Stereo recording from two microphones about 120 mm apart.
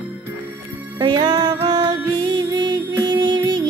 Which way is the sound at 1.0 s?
35° right (ahead or behind).